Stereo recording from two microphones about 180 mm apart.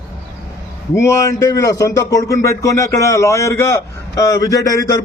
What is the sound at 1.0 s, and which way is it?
Speech, 15° left (ahead or behind).